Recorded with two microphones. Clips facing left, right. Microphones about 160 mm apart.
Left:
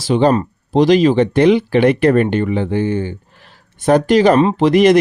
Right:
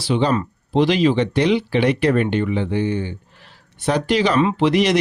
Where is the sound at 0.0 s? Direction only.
45° left (ahead or behind).